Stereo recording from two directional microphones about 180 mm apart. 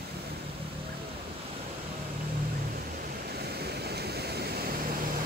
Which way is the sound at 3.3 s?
60° right (ahead or behind).